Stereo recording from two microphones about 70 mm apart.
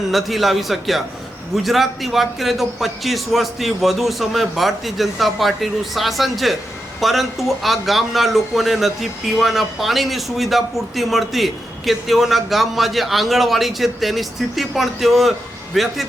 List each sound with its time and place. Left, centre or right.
0.1 s speech: centre